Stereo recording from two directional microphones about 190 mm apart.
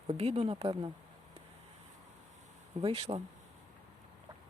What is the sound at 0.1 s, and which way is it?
Speech, 30° right (ahead or behind).